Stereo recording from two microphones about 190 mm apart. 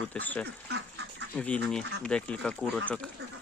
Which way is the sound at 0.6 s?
65° right (ahead or behind).